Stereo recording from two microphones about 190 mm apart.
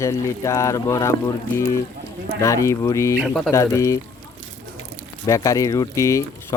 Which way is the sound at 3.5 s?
15° left (ahead or behind).